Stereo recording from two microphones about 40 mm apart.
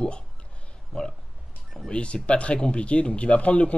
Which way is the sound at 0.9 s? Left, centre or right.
Centre.